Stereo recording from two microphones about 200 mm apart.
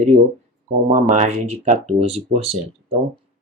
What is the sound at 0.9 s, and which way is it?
Speech, 40° right (ahead or behind).